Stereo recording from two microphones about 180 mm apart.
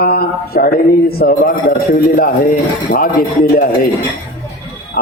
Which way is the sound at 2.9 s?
50° left (ahead or behind).